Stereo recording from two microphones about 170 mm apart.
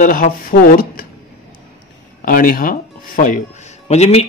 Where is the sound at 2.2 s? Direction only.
55° left (ahead or behind).